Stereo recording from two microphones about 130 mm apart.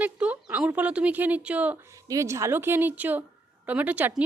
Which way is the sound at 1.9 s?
25° right (ahead or behind).